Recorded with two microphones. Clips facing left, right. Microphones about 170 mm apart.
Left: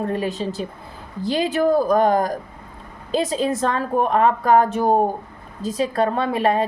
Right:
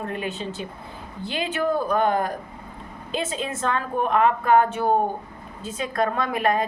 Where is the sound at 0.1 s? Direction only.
35° left (ahead or behind).